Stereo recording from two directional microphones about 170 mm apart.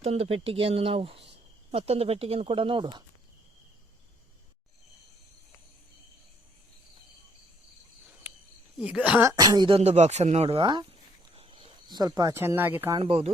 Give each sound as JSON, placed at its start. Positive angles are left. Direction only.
{"t": 0.0, "sound": "speech", "side_deg": -35}
{"t": 8.8, "sound": "speech", "side_deg": -5}
{"t": 9.3, "sound": "speech", "side_deg": -25}
{"t": 13.0, "sound": "speech", "side_deg": -35}